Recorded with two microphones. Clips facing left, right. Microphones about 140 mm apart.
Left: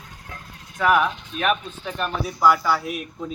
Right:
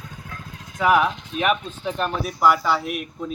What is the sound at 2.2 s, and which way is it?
Speech, centre (ahead or behind).